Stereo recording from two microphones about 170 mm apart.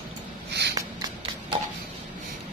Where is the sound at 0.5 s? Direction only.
80° right.